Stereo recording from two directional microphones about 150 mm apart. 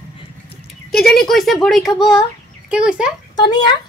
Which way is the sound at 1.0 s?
Centre (ahead or behind).